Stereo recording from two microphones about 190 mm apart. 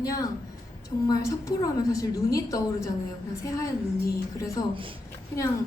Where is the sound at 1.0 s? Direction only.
15° left (ahead or behind).